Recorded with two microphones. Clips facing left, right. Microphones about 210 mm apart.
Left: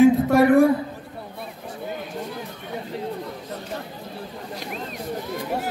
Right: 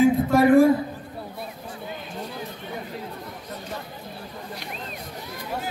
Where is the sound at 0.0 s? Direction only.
70° left (ahead or behind).